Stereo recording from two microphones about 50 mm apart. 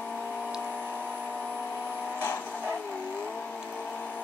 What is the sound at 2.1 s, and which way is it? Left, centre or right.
Vehicle, left.